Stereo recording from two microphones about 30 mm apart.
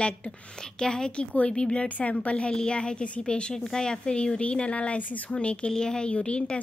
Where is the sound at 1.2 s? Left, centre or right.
Left.